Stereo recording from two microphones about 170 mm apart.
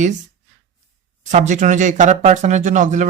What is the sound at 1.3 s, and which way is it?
Speech, 45° right (ahead or behind).